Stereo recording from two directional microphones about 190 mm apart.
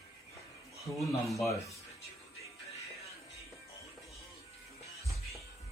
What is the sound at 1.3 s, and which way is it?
Speech, 15° left (ahead or behind).